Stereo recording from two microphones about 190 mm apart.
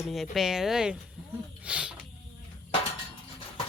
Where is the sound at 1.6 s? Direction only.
5° right (ahead or behind).